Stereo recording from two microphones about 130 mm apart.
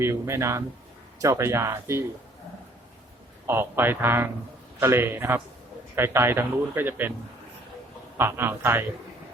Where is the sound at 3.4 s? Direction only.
20° right (ahead or behind).